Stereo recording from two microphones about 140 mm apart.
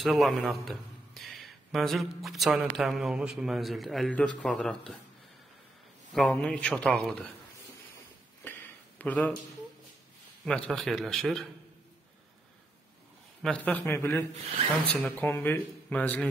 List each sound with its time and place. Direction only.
0.0 s a man's voice: centre (ahead or behind)
6.1 s speech: 5° left (ahead or behind)
8.5 s a sound: 15° left (ahead or behind)
10.4 s a man's voice: 5° left (ahead or behind)
13.4 s speech: 10° left (ahead or behind)